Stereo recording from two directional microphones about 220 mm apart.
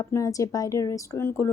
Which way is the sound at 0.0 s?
15° left (ahead or behind).